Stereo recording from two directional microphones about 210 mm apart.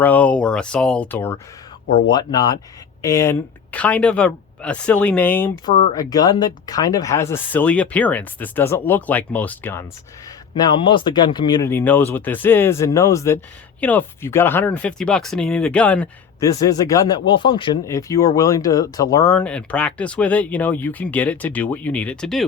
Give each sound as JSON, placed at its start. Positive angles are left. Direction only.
{"t": 0.0, "sound": "speech", "side_deg": 5}
{"t": 10.5, "sound": "speech", "side_deg": 20}
{"t": 16.4, "sound": "speech", "side_deg": 15}